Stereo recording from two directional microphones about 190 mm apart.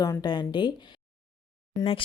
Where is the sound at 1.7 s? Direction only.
30° left (ahead or behind).